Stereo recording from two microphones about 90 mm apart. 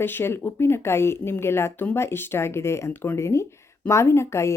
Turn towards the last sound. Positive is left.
turn(degrees=30)  # may be behind; listen again after turning